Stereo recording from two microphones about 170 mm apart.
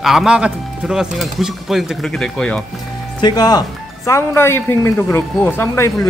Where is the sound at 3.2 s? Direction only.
25° left (ahead or behind).